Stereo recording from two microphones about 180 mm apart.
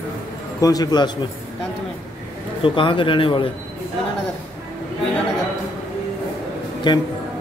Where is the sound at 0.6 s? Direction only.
20° left (ahead or behind).